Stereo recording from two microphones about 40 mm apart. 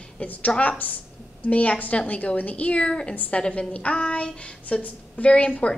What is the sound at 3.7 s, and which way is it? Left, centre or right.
A woman's voice, left.